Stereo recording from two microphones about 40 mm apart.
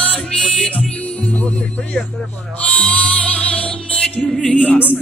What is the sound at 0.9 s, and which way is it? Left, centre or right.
Music, left.